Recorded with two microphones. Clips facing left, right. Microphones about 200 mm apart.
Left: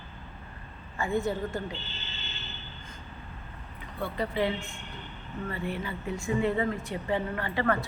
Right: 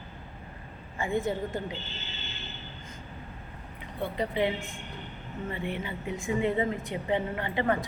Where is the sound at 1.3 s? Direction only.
20° right (ahead or behind).